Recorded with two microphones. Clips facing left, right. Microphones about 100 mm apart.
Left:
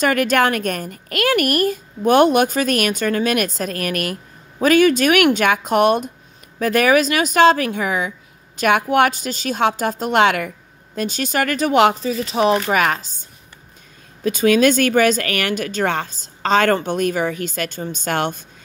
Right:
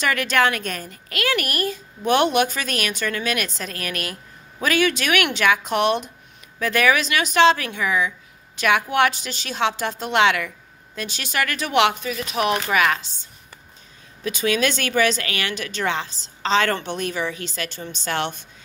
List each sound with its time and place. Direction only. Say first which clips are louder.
0.0 s a woman's voice: left 4 dB; 45° left (ahead or behind)